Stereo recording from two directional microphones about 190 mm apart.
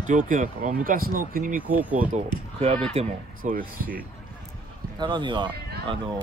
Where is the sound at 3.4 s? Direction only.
45° right (ahead or behind).